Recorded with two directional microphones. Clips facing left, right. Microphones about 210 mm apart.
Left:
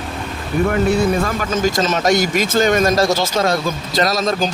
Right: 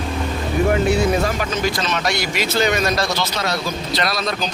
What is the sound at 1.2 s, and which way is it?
Speech, 45° left (ahead or behind).